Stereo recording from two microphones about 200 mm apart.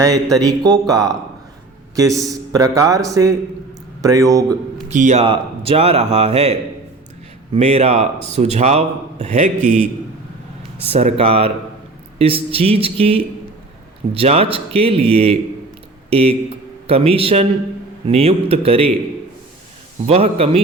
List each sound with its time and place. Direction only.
0.3 s a man's voice: 20° right (ahead or behind)
4.9 s a man's voice: 35° right (ahead or behind)
10.8 s speech: 30° right (ahead or behind)
20.1 s speech: 30° right (ahead or behind)